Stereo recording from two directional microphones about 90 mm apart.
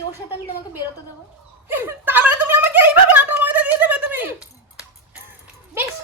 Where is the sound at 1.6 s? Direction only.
25° right (ahead or behind).